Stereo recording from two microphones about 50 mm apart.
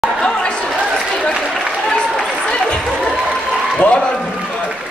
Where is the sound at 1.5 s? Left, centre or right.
Centre.